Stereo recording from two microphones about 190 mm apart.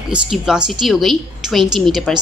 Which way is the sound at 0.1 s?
5° right (ahead or behind).